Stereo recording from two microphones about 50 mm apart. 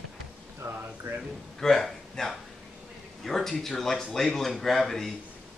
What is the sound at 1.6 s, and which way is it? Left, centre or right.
Speech, centre.